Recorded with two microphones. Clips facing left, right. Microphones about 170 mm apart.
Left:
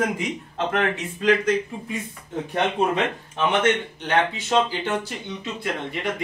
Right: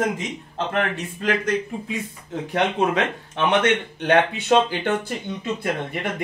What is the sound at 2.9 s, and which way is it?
A man's voice, 70° right (ahead or behind).